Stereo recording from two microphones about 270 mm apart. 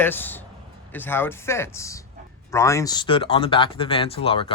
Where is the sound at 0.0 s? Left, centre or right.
Centre.